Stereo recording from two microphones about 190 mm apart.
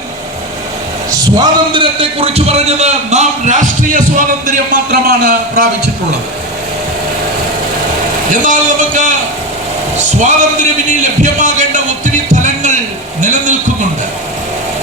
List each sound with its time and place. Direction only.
1.1 s a man's voice: 25° right (ahead or behind); by 5.6 s 50° right (ahead or behind)
8.3 s a man's voice: 45° right (ahead or behind)
10.2 s a man's voice: 40° right (ahead or behind)
12.3 s a sound: 40° right (ahead or behind)